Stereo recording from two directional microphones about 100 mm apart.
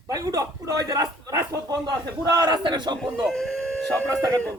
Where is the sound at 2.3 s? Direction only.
45° right (ahead or behind).